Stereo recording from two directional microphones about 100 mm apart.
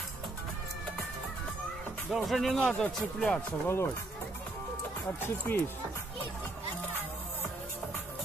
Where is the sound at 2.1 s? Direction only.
Centre (ahead or behind).